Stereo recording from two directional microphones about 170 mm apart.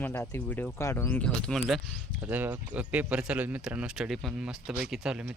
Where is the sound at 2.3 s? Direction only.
10° right (ahead or behind).